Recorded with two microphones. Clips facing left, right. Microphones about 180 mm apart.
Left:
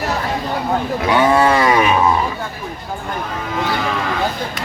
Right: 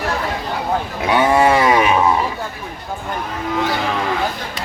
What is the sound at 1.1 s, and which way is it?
Livestock, 15° right (ahead or behind).